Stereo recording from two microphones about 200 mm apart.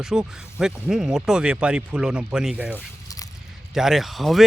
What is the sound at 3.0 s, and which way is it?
Biting, 15° left (ahead or behind).